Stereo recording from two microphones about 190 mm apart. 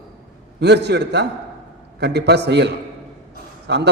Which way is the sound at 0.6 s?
60° right (ahead or behind).